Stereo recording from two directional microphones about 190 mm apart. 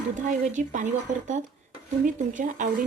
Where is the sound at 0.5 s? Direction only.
40° right (ahead or behind).